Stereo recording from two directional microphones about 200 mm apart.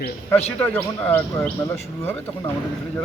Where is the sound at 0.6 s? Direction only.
10° left (ahead or behind).